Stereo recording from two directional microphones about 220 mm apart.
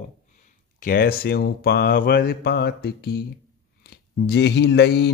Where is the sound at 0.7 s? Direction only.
40° left (ahead or behind).